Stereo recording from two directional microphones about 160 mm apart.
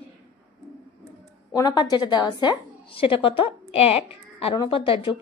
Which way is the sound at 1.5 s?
25° left (ahead or behind).